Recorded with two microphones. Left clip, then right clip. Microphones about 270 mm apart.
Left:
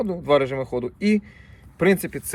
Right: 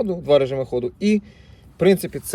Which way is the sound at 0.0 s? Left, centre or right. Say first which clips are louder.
Right 3 dB; centre.